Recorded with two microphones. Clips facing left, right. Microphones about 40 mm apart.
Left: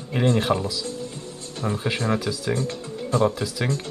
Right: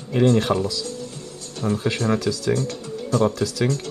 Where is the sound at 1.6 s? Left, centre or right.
Centre.